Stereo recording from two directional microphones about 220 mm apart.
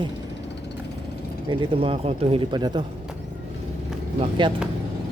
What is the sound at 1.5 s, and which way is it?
Speech, 25° right (ahead or behind).